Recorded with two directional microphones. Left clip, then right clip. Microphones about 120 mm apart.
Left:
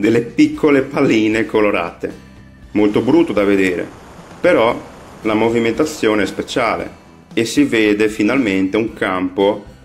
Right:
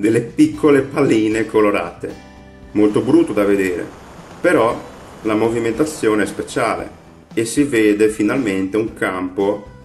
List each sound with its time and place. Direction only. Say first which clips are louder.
0.0 s speech: left 1 dB; 20° left (ahead or behind)